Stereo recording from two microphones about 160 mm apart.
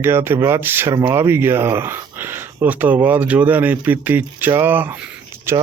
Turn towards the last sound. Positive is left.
turn(degrees=-15)  # may be behind; listen again after turning